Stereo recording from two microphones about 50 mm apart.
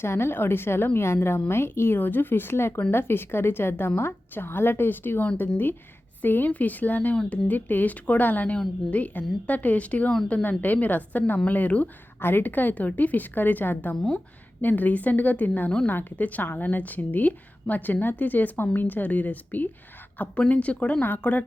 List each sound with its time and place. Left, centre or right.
0.0 s a woman's voice: left
0.9 s a woman's voice: left
16.1 s a woman's voice: left